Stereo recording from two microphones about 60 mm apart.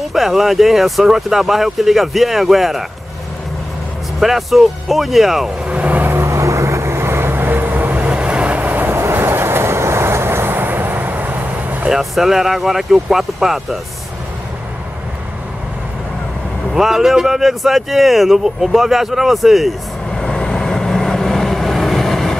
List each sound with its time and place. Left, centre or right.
0.1 s speech: centre
4.2 s speech: centre
5.7 s vehicle: right
6.1 s vehicle: right
11.9 s speech: centre
16.7 s speech: centre
20.1 s vehicle: centre